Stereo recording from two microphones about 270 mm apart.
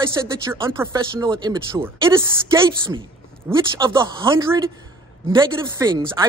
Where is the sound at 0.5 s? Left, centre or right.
Centre.